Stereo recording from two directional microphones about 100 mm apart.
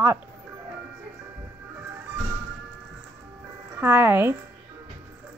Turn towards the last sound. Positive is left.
turn(degrees=-20)  # may be behind; listen again after turning